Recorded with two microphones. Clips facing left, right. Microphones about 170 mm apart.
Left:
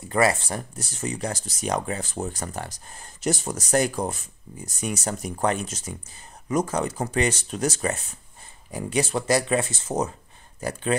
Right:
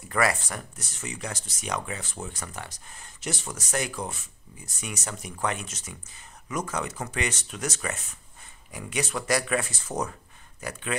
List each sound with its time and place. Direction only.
0.1 s speech: 25° left (ahead or behind)